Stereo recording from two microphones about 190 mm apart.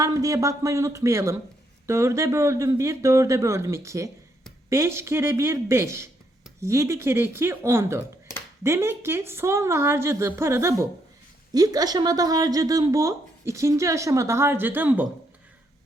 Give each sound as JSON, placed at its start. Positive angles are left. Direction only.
{"t": 0.0, "sound": "speech", "side_deg": -15}